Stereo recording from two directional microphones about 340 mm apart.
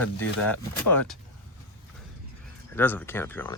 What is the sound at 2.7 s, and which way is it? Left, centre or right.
Speech, centre.